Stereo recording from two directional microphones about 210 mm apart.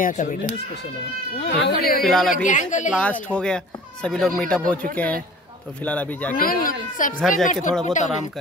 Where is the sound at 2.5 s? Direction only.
35° left (ahead or behind).